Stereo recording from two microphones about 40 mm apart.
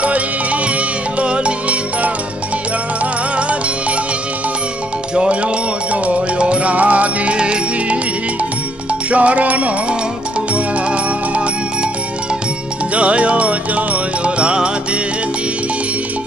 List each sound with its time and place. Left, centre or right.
0.0 s music: right
5.1 s music: right
9.1 s music: right
12.9 s music: right